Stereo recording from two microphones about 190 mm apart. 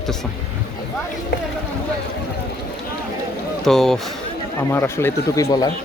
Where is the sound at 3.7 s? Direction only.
Centre (ahead or behind).